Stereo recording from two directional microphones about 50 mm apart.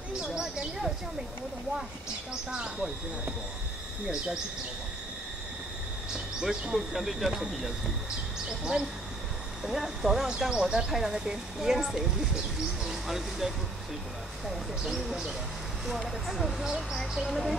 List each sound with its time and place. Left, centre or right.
0.2 s a sound: centre
2.5 s speech: centre
6.1 s speech: centre
8.5 s speech: centre
14.5 s speech: centre